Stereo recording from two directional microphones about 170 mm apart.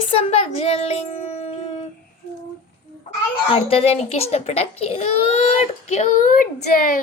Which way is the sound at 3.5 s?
35° left (ahead or behind).